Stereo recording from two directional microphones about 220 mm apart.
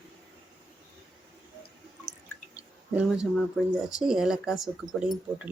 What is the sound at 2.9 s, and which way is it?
Speech, 5° right (ahead or behind).